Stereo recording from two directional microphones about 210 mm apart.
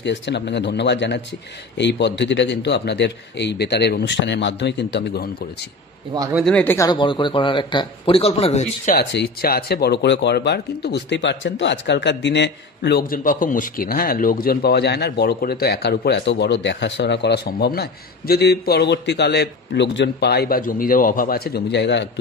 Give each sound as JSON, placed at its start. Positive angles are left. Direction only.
{"t": 0.0, "sound": "a man's voice", "side_deg": 55}
{"t": 6.3, "sound": "speech", "side_deg": 5}
{"t": 6.9, "sound": "speech", "side_deg": 25}
{"t": 8.9, "sound": "speech", "side_deg": 50}